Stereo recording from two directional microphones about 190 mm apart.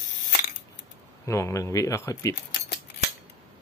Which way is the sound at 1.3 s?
15° left (ahead or behind).